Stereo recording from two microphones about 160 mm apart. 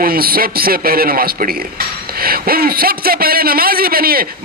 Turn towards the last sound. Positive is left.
turn(degrees=-70)  # may be behind; listen again after turning